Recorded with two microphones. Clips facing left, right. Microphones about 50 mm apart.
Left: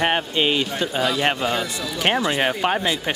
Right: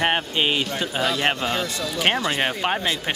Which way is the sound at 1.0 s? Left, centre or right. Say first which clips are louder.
Left 1 dB; centre.